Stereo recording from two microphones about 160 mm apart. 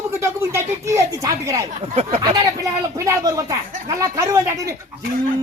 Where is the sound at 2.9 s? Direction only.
20° right (ahead or behind).